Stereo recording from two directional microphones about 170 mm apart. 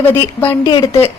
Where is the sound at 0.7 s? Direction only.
25° left (ahead or behind).